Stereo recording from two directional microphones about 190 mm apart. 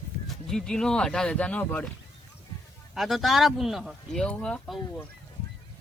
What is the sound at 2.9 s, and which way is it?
Speech, centre (ahead or behind).